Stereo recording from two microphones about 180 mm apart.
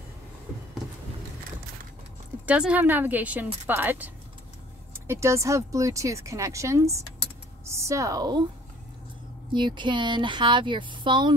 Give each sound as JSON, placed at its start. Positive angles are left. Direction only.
{"t": 2.4, "sound": "speech", "side_deg": -5}
{"t": 9.5, "sound": "speech", "side_deg": -25}